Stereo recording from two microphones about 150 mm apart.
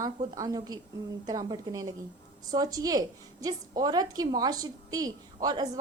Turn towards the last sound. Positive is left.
turn(degrees=-25)  # may be behind; listen again after turning